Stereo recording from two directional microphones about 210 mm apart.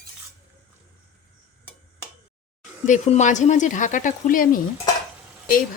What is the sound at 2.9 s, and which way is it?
Speech, 35° left (ahead or behind).